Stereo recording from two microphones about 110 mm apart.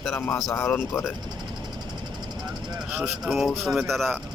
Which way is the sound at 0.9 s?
20° left (ahead or behind).